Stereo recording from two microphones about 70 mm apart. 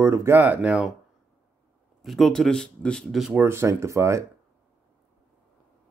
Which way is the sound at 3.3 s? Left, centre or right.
Right.